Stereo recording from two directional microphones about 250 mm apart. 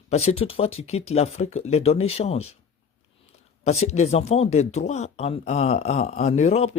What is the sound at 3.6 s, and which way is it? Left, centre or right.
Speech, left.